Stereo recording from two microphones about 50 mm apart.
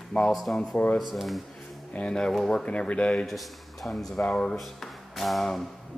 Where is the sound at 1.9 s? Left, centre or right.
Left.